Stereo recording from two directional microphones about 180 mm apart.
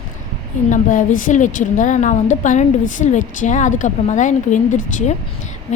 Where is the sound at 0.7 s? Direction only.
45° left (ahead or behind).